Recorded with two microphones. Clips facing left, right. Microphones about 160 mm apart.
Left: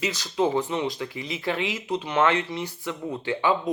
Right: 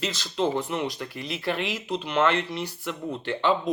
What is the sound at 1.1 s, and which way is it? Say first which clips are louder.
Speech: left 1 dB; 65° right (ahead or behind).